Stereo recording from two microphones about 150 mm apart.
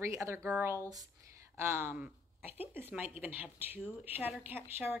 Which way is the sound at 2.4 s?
40° left (ahead or behind).